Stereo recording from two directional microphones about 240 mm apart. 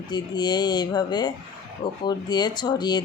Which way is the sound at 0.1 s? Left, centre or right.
Centre.